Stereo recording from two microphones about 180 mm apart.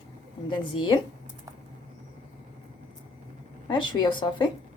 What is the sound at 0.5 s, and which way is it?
Speech, 25° left (ahead or behind).